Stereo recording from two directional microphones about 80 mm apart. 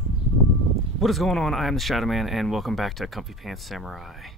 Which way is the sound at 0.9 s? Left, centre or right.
Centre.